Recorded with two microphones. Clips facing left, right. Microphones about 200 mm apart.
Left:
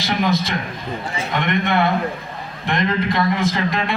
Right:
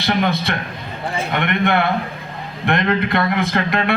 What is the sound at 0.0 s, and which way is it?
A man's voice, 60° right (ahead or behind).